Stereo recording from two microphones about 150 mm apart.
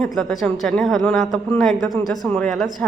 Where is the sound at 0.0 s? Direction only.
Centre (ahead or behind).